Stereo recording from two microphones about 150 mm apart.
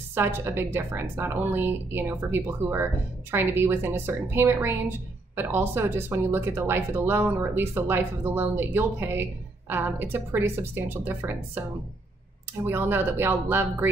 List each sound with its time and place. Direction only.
0.1 s a woman's voice: 15° right (ahead or behind)
12.6 s a woman's voice: 15° right (ahead or behind)